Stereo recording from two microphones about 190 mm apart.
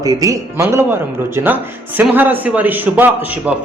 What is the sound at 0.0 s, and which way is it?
A man's voice, 20° right (ahead or behind).